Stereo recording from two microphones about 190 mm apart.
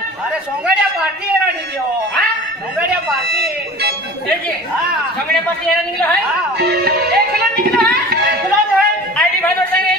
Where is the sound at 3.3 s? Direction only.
55° right (ahead or behind).